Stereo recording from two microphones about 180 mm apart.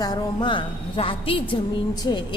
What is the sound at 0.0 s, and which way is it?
A woman's voice, 20° left (ahead or behind).